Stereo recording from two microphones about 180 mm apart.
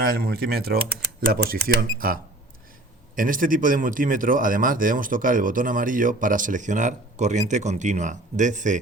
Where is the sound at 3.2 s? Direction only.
50° right (ahead or behind).